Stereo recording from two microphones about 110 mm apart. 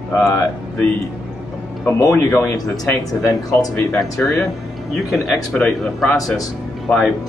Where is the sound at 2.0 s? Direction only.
30° left (ahead or behind).